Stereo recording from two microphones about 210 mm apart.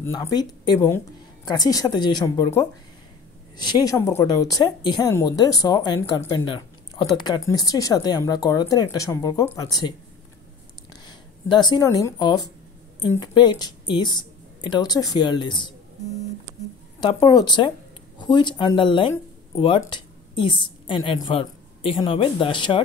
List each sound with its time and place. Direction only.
0.0 s speech: 15° left (ahead or behind)
17.0 s speech: 20° left (ahead or behind)